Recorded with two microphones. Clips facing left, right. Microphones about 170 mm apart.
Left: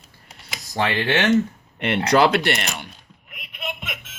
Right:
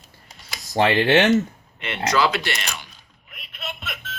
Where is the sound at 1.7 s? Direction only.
55° left (ahead or behind).